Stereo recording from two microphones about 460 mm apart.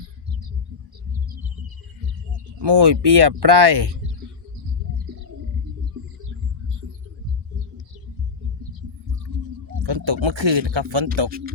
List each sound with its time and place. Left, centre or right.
2.6 s speech: right
9.8 s speech: right
11.3 s speech: centre